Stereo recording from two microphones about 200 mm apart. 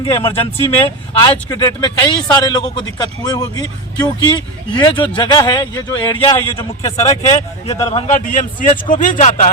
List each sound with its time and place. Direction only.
0.1 s a man's voice: 30° left (ahead or behind)